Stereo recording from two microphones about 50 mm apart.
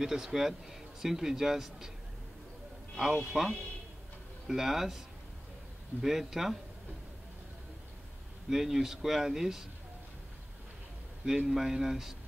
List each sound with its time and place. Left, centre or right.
0.0 s speech: centre
3.0 s speech: centre
6.0 s speech: centre
8.5 s speech: centre
11.2 s speech: centre